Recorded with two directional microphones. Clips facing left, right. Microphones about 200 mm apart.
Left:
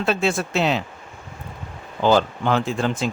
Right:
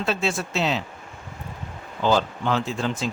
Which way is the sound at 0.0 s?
55° left (ahead or behind).